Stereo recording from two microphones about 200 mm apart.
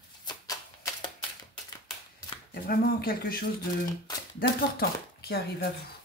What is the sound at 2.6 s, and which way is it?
Speech, 45° left (ahead or behind).